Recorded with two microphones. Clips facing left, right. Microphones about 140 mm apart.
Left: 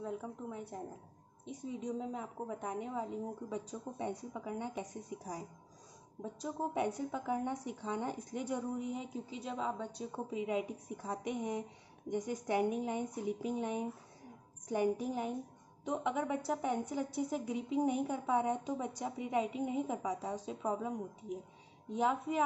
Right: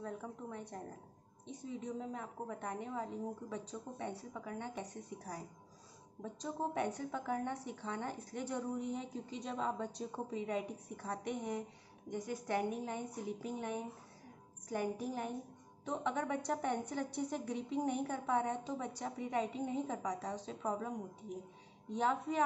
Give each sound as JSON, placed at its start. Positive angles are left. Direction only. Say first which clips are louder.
{"t": 0.0, "sound": "a woman's voice", "louder": "left 3 dB", "side_deg": 10}
{"t": 21.9, "sound": "a woman's voice", "louder": "left 2 dB", "side_deg": 10}